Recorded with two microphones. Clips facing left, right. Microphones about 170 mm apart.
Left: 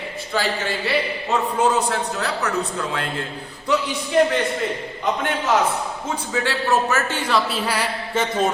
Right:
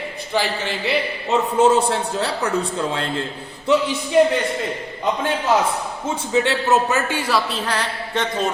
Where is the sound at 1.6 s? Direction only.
25° right (ahead or behind).